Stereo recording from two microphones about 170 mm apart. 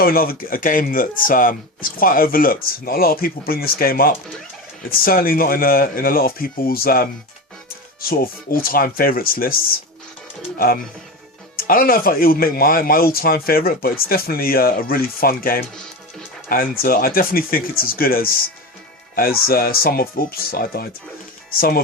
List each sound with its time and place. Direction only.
0.0 s speech: 60° left (ahead or behind)
11.5 s speech: 60° left (ahead or behind)